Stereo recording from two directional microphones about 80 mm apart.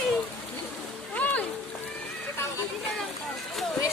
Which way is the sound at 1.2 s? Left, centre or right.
Centre.